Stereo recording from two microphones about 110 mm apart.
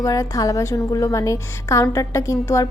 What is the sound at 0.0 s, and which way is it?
A woman's voice, 30° left (ahead or behind).